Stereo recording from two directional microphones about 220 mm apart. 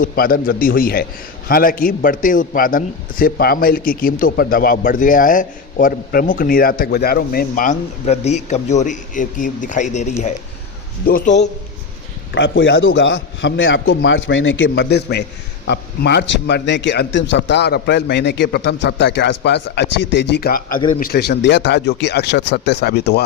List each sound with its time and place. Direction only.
0.0 s a man's voice: 40° left (ahead or behind)
12.3 s a man's voice: 55° left (ahead or behind)